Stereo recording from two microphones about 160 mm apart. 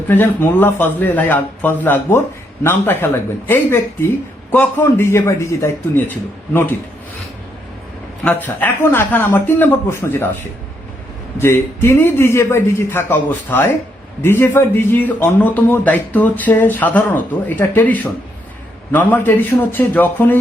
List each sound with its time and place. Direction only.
0.1 s a man's voice: 10° left (ahead or behind)
8.2 s a man's voice: 10° left (ahead or behind)
11.3 s a man's voice: 15° left (ahead or behind)